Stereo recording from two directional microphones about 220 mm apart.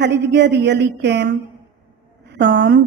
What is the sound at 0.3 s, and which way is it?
A woman's voice, 50° right (ahead or behind).